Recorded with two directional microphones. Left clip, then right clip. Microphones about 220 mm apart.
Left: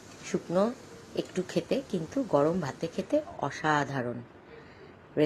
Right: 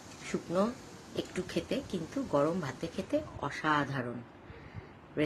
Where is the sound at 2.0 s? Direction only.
Centre (ahead or behind).